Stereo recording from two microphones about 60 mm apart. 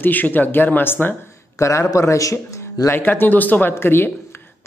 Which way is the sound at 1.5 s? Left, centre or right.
Left.